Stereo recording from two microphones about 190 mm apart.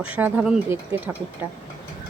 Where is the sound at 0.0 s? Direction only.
10° right (ahead or behind).